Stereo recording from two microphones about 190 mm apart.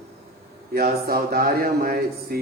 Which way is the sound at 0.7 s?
55° right (ahead or behind).